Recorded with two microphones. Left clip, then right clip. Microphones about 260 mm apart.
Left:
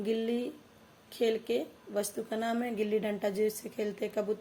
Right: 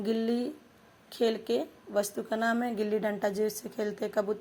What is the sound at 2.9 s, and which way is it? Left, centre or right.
Speech, right.